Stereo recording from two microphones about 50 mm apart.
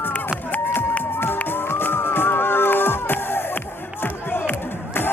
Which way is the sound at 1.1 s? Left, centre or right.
Left.